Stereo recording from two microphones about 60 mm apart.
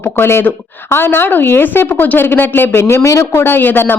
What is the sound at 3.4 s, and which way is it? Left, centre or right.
Speech, left.